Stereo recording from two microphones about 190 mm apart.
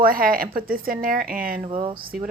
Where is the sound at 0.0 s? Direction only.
50° right (ahead or behind).